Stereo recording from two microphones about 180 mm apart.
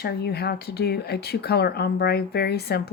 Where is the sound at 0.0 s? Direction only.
60° left (ahead or behind).